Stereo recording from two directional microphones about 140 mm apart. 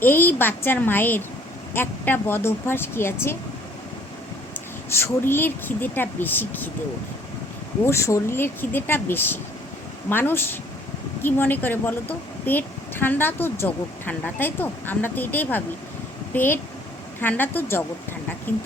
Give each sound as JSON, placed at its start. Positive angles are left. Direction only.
{"t": 0.0, "sound": "a woman's voice", "side_deg": 15}
{"t": 4.9, "sound": "a woman's voice", "side_deg": 15}
{"t": 7.9, "sound": "a woman's voice", "side_deg": 20}